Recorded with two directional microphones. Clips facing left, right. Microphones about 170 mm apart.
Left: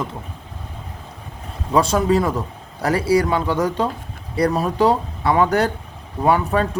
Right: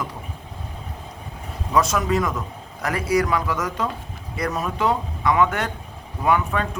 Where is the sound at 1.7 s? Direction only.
30° left (ahead or behind).